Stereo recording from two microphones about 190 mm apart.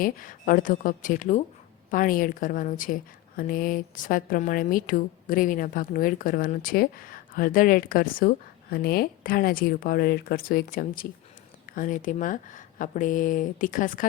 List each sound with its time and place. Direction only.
0.0 s a woman's voice: 45° left (ahead or behind)